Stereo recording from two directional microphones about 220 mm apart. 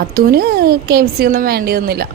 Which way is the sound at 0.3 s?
45° right (ahead or behind).